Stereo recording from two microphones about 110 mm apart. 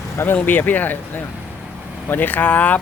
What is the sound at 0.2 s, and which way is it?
Speech, 20° left (ahead or behind).